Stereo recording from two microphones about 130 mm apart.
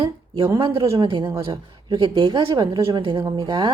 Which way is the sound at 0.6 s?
40° right (ahead or behind).